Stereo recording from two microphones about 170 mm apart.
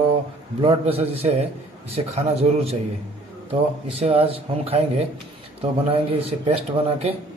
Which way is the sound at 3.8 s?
35° right (ahead or behind).